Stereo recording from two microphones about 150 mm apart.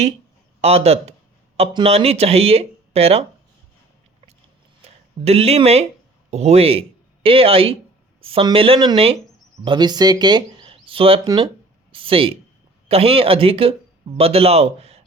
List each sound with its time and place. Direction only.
0.6 s speech: 45° right (ahead or behind)
5.2 s speech: 45° right (ahead or behind)